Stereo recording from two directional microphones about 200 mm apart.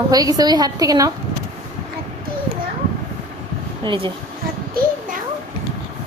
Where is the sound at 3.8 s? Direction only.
25° right (ahead or behind).